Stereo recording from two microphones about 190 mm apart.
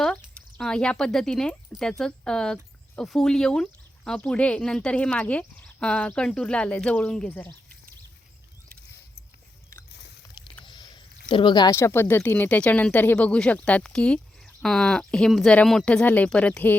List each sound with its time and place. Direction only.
0.0 s speech: 5° left (ahead or behind)
10.7 s a sound: 25° left (ahead or behind)
11.3 s speech: 25° left (ahead or behind); by 16.7 s 5° left (ahead or behind)